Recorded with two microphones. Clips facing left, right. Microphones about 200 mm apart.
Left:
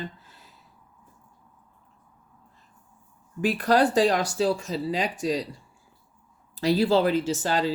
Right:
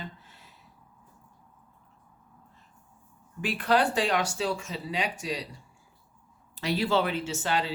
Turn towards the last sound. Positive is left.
turn(degrees=40)  # may be behind; listen again after turning